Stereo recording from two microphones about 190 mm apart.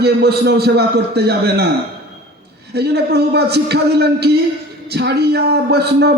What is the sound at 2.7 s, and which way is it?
Speech, 60° right (ahead or behind).